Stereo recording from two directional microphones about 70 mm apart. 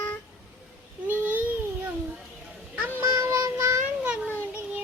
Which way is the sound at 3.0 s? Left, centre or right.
Right.